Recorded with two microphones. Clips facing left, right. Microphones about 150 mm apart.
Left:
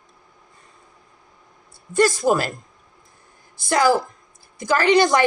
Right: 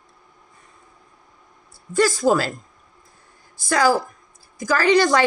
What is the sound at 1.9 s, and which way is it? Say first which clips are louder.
Speech: even; 20° left (ahead or behind).